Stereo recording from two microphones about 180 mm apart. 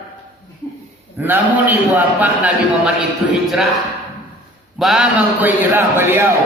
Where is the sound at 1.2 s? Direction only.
10° right (ahead or behind).